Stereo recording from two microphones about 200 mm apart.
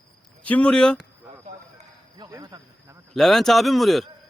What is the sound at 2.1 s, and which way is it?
Speech, 20° right (ahead or behind).